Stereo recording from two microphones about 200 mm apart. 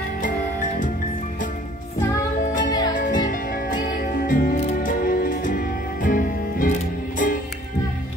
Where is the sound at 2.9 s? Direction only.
40° left (ahead or behind).